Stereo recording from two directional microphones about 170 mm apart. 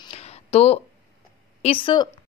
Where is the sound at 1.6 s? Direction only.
30° left (ahead or behind).